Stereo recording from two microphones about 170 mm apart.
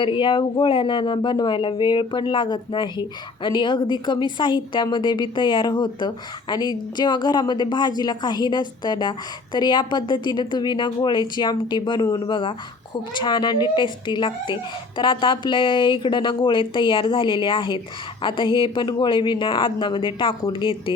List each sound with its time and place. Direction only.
0.0 s speech: 30° left (ahead or behind)